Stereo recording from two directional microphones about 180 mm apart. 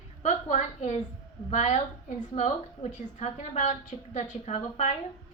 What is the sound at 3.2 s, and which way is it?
A woman's voice, 40° left (ahead or behind).